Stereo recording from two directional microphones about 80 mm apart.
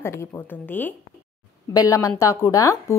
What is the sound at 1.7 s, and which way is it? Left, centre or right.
A woman's voice, left.